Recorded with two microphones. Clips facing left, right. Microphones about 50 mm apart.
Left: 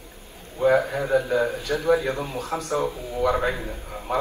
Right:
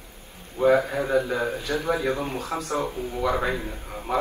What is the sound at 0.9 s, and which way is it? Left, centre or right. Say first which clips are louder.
A man's voice: left 2 dB; right.